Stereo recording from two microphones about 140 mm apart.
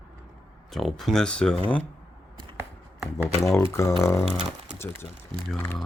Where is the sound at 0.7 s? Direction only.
Centre (ahead or behind).